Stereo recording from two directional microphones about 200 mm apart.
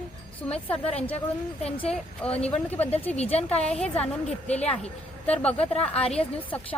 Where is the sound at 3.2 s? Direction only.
30° left (ahead or behind).